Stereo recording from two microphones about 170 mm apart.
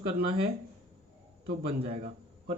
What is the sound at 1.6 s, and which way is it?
Speech, 35° right (ahead or behind).